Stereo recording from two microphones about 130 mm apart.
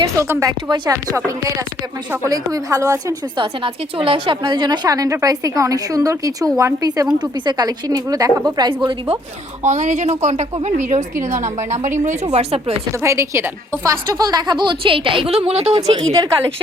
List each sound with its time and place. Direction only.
0.3 s a woman's voice: 25° right (ahead or behind)
2.2 s a woman's voice: 25° right (ahead or behind)
3.3 s a woman's voice: 40° right (ahead or behind)
9.6 s a woman's voice: 65° right (ahead or behind); by 12.7 s 50° right (ahead or behind)
13.0 s a woman's voice: 20° right (ahead or behind); by 16.1 s 45° right (ahead or behind)